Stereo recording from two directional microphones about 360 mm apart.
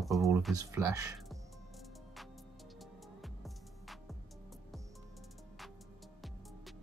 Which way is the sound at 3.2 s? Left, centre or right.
Centre.